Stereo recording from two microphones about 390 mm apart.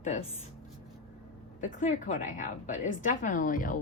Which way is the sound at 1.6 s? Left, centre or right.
Centre.